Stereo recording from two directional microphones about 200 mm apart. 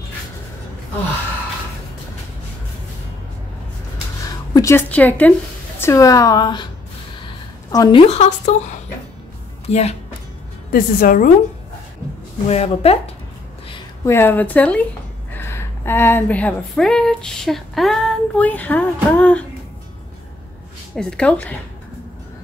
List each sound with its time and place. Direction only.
4.6 s a woman's voice: 10° left (ahead or behind)
7.7 s a woman's voice: 20° left (ahead or behind)
8.1 s a woman's voice: 35° left (ahead or behind)
10.7 s a woman's voice: 45° left (ahead or behind)
12.4 s a woman's voice: 30° left (ahead or behind)
14.0 s a woman's voice: 10° left (ahead or behind)
20.9 s a woman's voice: 5° left (ahead or behind)